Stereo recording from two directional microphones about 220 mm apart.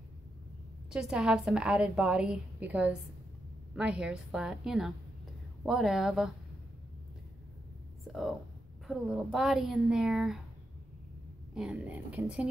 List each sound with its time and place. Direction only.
0.9 s a woman's voice: centre (ahead or behind)
8.1 s a woman's voice: centre (ahead or behind)
11.5 s a woman's voice: 5° right (ahead or behind)